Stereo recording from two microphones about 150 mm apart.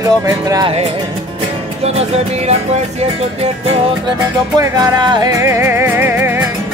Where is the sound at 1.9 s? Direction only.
45° right (ahead or behind).